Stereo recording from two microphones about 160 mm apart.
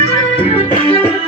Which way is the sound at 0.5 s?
35° left (ahead or behind).